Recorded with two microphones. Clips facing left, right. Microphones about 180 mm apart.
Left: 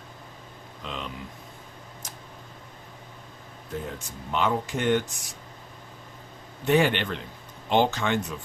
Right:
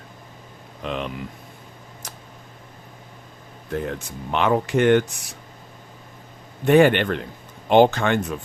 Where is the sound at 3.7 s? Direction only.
70° right (ahead or behind).